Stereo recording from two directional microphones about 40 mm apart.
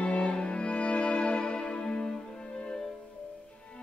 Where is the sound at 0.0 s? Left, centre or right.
Left.